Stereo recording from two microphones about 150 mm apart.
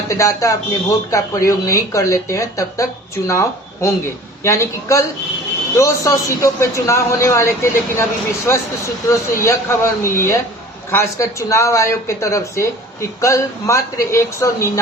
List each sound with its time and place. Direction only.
0.1 s speech: 20° left (ahead or behind)